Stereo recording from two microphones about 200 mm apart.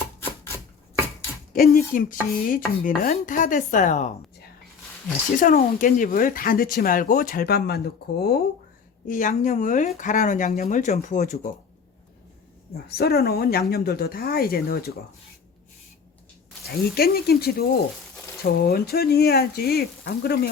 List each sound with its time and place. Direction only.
0.2 s chopping: 15° left (ahead or behind)
1.7 s a sound: 45° left (ahead or behind)
5.4 s speech: 40° left (ahead or behind)
9.0 s a sound: 40° left (ahead or behind)
12.7 s speech: 50° left (ahead or behind)
16.6 s speech: 50° left (ahead or behind)